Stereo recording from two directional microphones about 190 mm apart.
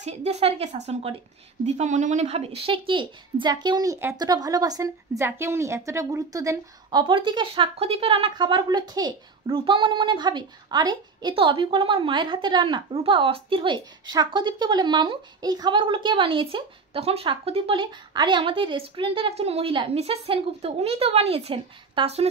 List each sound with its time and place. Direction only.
0.0 s a woman's voice: 35° right (ahead or behind)